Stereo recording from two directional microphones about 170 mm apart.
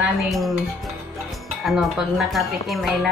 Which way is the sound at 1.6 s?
Centre (ahead or behind).